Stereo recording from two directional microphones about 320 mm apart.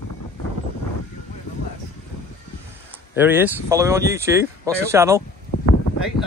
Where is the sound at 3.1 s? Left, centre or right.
Centre.